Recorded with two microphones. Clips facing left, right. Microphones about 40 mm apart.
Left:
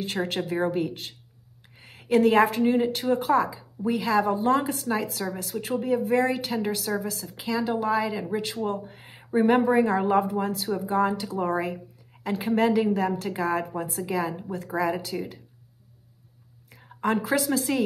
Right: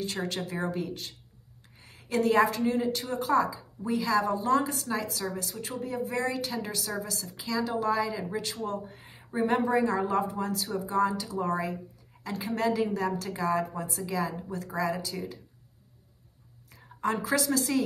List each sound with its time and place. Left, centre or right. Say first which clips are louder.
0.0 s speech: left 4 dB; left
16.7 s a woman's voice: left 4 dB; left